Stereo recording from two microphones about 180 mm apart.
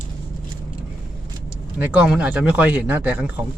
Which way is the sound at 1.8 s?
5° right (ahead or behind).